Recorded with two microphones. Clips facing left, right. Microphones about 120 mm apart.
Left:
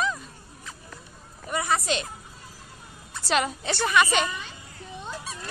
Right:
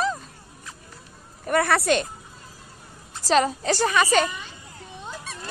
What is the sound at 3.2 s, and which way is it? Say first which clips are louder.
Speech: right 5 dB; 35° right (ahead or behind).